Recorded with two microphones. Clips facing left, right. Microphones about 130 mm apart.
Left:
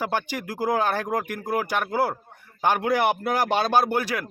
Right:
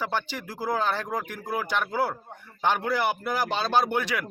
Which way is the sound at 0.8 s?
45° left (ahead or behind).